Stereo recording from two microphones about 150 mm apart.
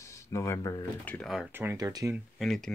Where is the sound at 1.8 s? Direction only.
25° right (ahead or behind).